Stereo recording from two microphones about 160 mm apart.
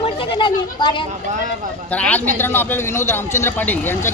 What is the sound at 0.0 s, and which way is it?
Speech, 30° left (ahead or behind).